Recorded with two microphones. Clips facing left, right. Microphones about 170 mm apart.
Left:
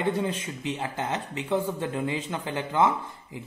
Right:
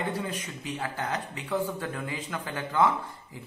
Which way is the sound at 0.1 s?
25° left (ahead or behind).